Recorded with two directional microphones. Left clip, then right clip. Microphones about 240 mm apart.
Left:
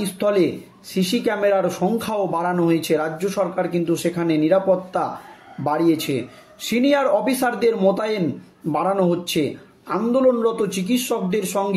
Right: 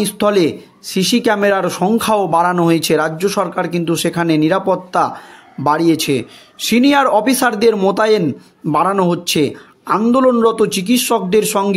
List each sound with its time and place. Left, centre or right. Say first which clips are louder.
0.2 s a man's voice: right 4 dB; right